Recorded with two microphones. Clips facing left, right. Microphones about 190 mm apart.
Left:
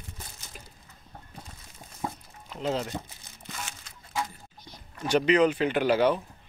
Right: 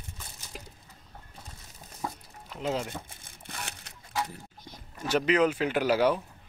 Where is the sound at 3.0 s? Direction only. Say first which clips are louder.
Left 1 dB; 55° right (ahead or behind).